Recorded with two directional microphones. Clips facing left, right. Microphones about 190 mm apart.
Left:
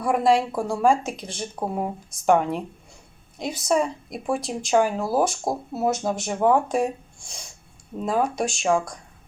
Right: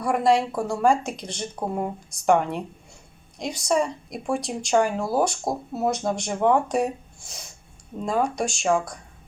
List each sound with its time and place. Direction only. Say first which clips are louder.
0.0 s speech: left 1 dB; 5° left (ahead or behind)